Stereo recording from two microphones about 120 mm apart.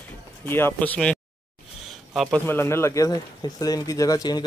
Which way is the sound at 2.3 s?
20° left (ahead or behind).